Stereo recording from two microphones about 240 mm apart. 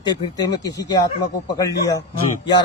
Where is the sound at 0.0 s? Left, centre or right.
Centre.